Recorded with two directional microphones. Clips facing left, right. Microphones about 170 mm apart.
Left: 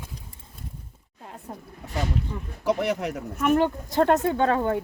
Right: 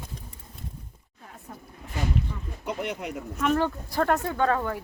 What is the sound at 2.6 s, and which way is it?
Speech, 80° left.